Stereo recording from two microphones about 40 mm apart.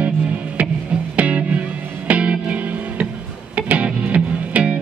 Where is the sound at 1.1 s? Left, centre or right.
Right.